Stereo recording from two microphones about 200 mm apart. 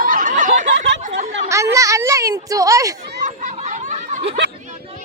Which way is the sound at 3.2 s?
35° right (ahead or behind).